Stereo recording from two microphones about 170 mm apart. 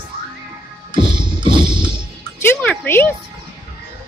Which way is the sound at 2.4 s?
10° left (ahead or behind).